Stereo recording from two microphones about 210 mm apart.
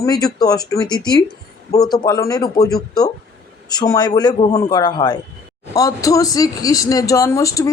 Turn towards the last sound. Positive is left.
turn(degrees=15)  # may be behind; listen again after turning